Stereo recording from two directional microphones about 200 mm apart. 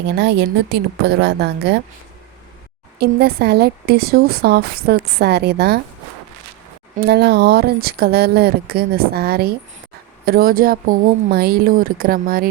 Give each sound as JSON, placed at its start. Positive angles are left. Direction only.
{"t": 0.0, "sound": "a woman's voice", "side_deg": -60}
{"t": 3.0, "sound": "a woman's voice", "side_deg": -50}
{"t": 6.9, "sound": "a woman's voice", "side_deg": -55}